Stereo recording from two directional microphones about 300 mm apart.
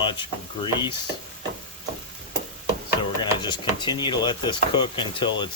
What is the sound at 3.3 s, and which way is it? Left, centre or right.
Speech, centre.